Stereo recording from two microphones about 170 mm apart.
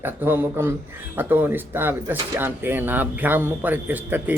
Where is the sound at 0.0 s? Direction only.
15° right (ahead or behind).